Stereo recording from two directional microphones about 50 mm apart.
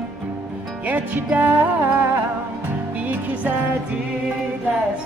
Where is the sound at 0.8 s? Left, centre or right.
Right.